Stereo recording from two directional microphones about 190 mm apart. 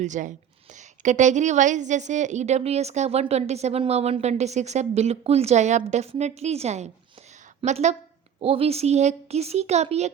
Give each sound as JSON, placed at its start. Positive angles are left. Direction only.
{"t": 0.0, "sound": "a woman's voice", "side_deg": -40}